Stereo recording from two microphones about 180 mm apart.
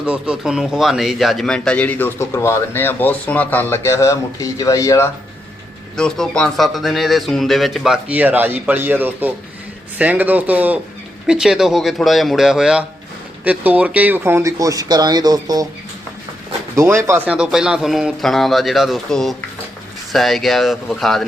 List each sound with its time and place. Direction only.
0.0 s speech: 5° right (ahead or behind); by 5.1 s 15° left (ahead or behind)
6.0 s speech: 5° left (ahead or behind); by 15.6 s 20° right (ahead or behind)
16.7 s speech: 15° right (ahead or behind); by 21.2 s centre (ahead or behind)